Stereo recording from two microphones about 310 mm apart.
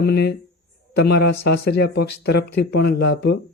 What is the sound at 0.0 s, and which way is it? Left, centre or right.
Speech, left.